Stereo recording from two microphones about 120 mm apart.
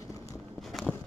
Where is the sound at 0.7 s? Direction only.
Centre (ahead or behind).